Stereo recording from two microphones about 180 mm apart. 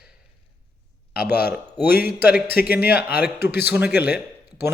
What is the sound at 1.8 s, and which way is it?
Speech, 60° left (ahead or behind).